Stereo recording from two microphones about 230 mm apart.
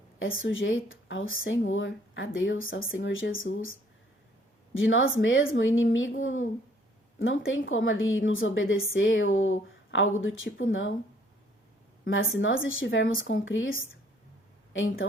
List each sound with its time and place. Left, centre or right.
0.2 s a woman's voice: left
12.0 s a woman's voice: left